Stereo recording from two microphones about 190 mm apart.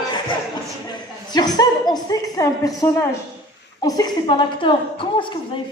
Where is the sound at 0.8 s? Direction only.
20° left (ahead or behind).